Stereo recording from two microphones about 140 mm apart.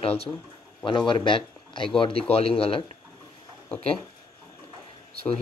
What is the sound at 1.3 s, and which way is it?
Speech, 35° left (ahead or behind).